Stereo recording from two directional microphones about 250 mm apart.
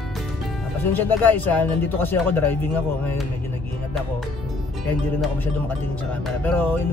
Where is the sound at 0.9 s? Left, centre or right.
Centre.